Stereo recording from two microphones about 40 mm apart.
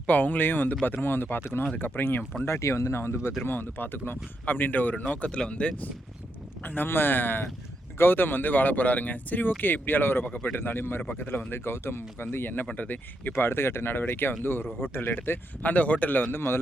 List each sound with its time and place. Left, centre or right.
0.1 s speech: left
3.0 s speech: left
3.4 s speech: left
4.5 s speech: left
5.0 s speech: left
6.7 s speech: left
11.2 s speech: left
12.7 s speech: left
13.3 s speech: left
14.4 s speech: left
14.9 s speech: left
15.6 s speech: left
16.3 s a man's voice: left